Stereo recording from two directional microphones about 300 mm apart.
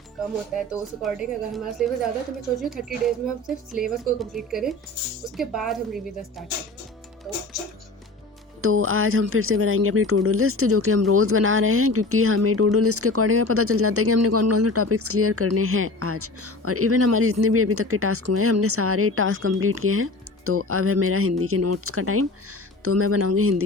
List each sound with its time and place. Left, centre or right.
1.0 s speech: centre
8.6 s speech: right